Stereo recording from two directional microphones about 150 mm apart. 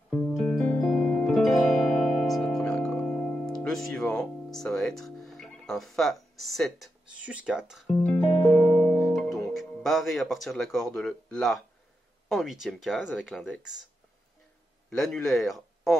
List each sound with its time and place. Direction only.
0.4 s music: 5° left (ahead or behind)
12.3 s speech: centre (ahead or behind)
14.9 s a man's voice: 5° left (ahead or behind)